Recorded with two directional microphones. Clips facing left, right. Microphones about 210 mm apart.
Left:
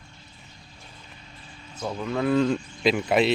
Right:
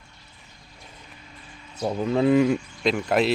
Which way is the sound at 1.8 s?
35° right (ahead or behind).